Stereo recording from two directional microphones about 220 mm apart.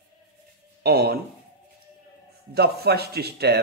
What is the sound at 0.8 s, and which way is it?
Speech, 45° right (ahead or behind).